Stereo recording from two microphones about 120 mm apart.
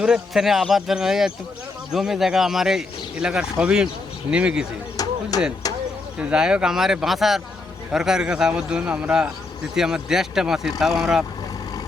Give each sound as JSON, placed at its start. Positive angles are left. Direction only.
{"t": 0.0, "sound": "a man's voice", "side_deg": -5}
{"t": 5.0, "sound": "a sound", "side_deg": 30}
{"t": 6.1, "sound": "a man's voice", "side_deg": -5}